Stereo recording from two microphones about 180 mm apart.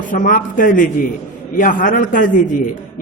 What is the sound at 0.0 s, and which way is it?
A man's voice, 45° left (ahead or behind).